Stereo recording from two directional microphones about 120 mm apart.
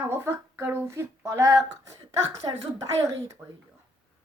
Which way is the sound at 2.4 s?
40° right (ahead or behind).